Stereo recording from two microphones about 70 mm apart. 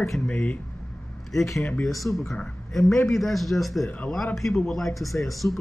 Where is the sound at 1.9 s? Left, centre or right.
Left.